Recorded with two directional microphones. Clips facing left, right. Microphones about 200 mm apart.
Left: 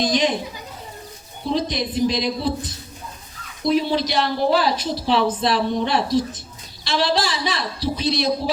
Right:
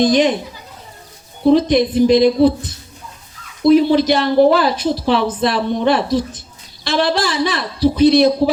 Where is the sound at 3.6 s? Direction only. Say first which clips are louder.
Right 9 dB; 55° right (ahead or behind).